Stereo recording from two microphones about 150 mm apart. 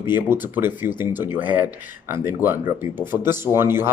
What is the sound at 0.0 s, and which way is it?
Speech, 15° right (ahead or behind).